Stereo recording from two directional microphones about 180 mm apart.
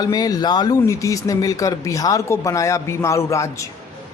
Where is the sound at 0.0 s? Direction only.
20° left (ahead or behind).